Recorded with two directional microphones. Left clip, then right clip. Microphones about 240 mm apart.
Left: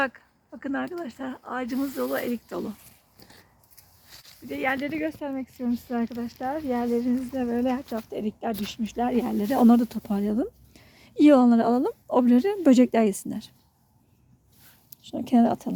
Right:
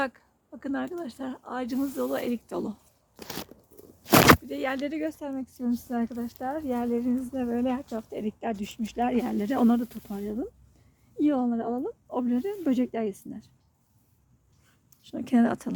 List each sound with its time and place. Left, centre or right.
0.0 s speech: centre
4.4 s speech: centre
9.6 s speech: left
15.0 s speech: centre